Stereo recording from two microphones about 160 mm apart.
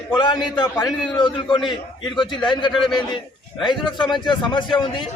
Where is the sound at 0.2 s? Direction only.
30° left (ahead or behind).